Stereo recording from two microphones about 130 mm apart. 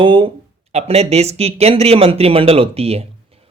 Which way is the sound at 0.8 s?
55° right (ahead or behind).